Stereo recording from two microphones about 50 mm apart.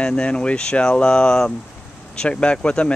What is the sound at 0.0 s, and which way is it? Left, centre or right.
Speech, left.